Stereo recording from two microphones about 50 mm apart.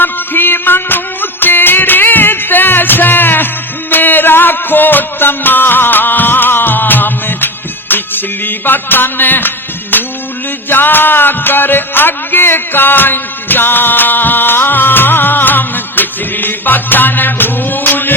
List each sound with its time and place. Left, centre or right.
0.0 s music: left